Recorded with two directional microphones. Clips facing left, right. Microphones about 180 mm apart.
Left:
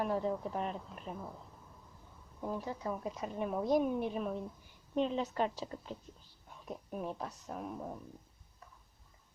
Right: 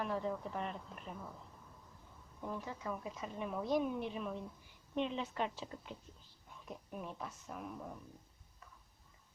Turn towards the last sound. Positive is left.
turn(degrees=35)  # may be behind; listen again after turning